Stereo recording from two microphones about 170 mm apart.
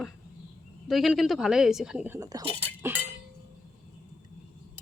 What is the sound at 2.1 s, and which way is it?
Speech, 15° right (ahead or behind).